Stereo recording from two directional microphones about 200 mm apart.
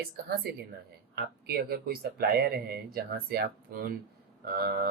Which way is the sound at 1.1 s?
50° right (ahead or behind).